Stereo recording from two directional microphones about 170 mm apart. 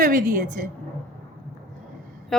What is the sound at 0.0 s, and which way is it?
Speech, 60° right (ahead or behind).